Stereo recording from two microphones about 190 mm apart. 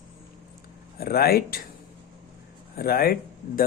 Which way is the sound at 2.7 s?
50° left (ahead or behind).